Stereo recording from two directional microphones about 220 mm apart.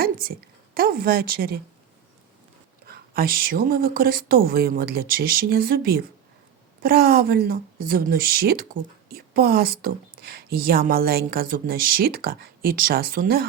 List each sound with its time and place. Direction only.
0.0 s a woman's voice: 40° right (ahead or behind)
2.8 s speech: 45° right (ahead or behind)